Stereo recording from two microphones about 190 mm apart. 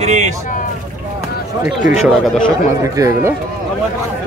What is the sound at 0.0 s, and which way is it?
Speech, 40° right (ahead or behind).